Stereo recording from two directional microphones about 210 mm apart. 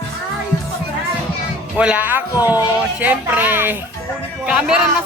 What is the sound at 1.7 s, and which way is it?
Speech, 5° right (ahead or behind).